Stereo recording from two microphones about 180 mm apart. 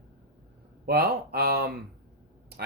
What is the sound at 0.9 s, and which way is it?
Speech, 60° right (ahead or behind).